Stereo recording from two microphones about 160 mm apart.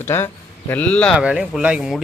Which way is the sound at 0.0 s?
15° left (ahead or behind).